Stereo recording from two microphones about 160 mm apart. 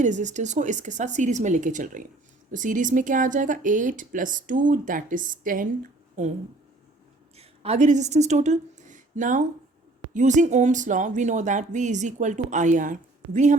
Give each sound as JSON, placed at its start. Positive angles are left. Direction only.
{"t": 0.0, "sound": "speech", "side_deg": -50}
{"t": 7.3, "sound": "speech", "side_deg": -40}